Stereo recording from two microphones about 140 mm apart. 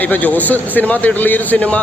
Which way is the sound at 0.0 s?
10° left (ahead or behind).